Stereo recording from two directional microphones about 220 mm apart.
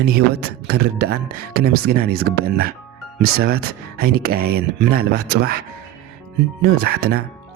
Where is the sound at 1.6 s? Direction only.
45° right (ahead or behind).